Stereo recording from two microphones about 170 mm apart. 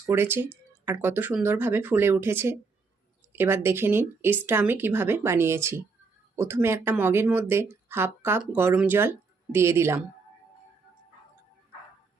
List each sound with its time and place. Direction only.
0.0 s speech: 15° right (ahead or behind)